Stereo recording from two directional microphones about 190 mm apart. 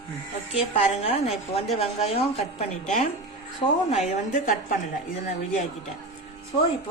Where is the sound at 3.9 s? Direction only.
40° left (ahead or behind).